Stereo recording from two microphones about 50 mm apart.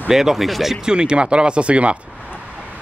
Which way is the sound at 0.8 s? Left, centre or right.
Centre.